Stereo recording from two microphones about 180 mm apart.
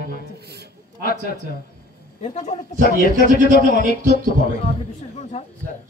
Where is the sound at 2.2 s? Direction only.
40° left (ahead or behind).